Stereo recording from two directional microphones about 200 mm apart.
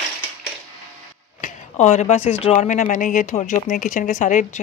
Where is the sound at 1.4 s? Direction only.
35° left (ahead or behind).